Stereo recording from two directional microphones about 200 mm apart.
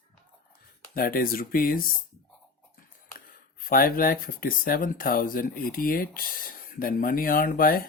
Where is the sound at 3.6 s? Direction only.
45° left (ahead or behind).